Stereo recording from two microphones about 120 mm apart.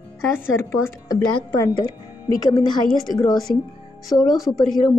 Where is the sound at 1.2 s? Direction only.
40° left (ahead or behind).